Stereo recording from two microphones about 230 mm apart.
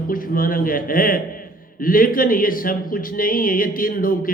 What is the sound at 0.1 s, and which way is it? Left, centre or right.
A man's voice, left.